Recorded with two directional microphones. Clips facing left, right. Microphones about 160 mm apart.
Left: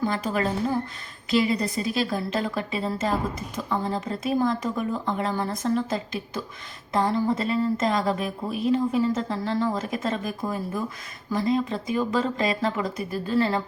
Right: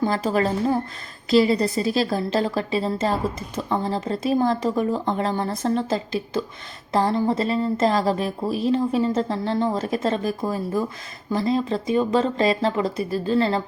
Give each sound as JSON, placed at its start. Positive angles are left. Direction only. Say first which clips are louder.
{"t": 0.0, "sound": "a woman's voice", "louder": "right 4 dB", "side_deg": -30}